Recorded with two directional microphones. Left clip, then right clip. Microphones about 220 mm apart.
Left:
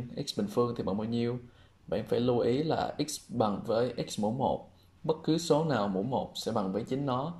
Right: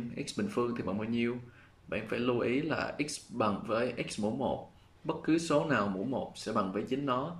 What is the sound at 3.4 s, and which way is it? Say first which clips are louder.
Speech: left 2 dB; 20° left (ahead or behind).